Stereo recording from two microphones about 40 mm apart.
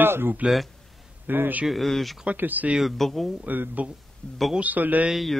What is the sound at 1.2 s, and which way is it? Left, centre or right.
Speech, right.